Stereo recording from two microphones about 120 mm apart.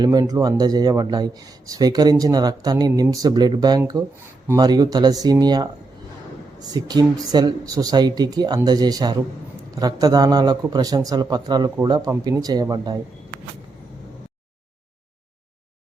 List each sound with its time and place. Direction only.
0.0 s speech: 30° right (ahead or behind)